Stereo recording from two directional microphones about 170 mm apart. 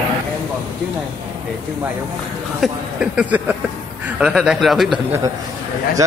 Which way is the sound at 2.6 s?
5° right (ahead or behind).